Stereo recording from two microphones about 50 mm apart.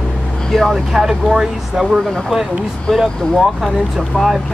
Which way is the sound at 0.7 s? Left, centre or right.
Centre.